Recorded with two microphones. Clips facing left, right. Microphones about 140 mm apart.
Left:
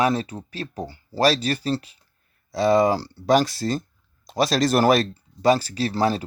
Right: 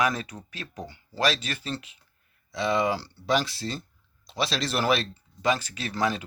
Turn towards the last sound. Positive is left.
turn(degrees=35)  # may be behind; listen again after turning